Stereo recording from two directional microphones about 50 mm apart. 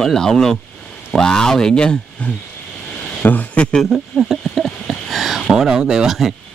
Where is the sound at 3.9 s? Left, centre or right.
Centre.